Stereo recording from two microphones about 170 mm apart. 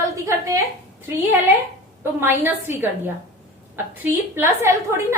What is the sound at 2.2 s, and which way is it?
Speech, 10° right (ahead or behind).